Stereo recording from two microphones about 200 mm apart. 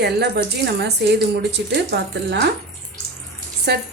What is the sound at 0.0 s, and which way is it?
Speech, 55° right (ahead or behind).